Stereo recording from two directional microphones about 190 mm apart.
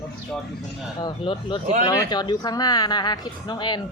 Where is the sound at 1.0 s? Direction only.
25° left (ahead or behind).